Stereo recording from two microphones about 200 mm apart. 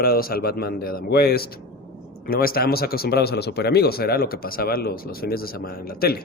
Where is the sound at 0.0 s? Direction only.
50° left (ahead or behind).